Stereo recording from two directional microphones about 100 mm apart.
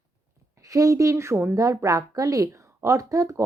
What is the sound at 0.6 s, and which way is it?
A woman's voice, 35° right (ahead or behind).